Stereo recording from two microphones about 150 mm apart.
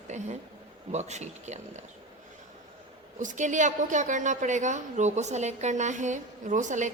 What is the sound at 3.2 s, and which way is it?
A woman's voice, 55° right (ahead or behind).